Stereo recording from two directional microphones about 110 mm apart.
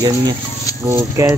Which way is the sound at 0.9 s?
25° right (ahead or behind).